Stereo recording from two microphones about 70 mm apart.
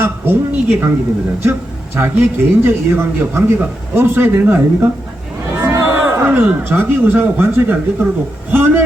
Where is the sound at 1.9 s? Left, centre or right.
Right.